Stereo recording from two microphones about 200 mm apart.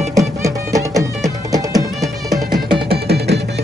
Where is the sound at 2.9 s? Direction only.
55° right (ahead or behind).